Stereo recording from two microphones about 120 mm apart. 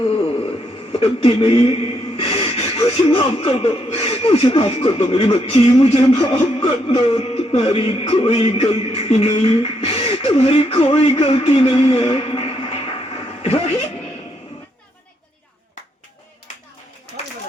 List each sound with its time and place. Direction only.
0.9 s speech: 50° left (ahead or behind)
13.4 s music: 65° left (ahead or behind)